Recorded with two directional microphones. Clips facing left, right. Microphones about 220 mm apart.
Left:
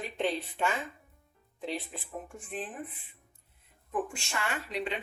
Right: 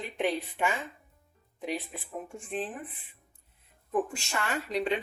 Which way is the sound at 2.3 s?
25° right (ahead or behind).